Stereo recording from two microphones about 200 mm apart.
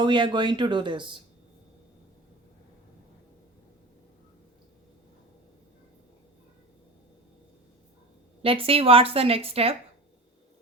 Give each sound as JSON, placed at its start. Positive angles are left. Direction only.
{"t": 0.0, "sound": "a woman's voice", "side_deg": -20}
{"t": 8.4, "sound": "a woman's voice", "side_deg": -30}